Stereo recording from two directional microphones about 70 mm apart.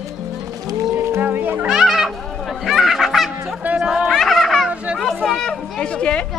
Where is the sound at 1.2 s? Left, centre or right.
Right.